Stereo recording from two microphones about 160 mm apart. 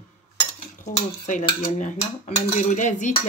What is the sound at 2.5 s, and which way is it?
Speech, 50° left (ahead or behind).